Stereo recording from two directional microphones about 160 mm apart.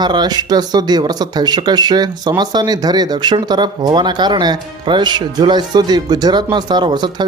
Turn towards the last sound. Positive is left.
turn(degrees=-30)  # may be behind; listen again after turning